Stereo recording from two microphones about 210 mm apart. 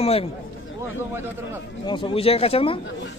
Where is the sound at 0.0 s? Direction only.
30° left (ahead or behind).